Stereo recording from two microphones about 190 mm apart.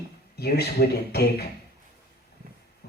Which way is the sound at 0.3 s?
60° left (ahead or behind).